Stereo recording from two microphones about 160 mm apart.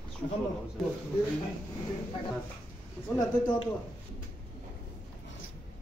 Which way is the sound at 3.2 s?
25° left (ahead or behind).